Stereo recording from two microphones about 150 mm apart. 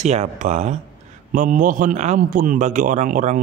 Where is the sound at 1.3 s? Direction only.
65° right (ahead or behind).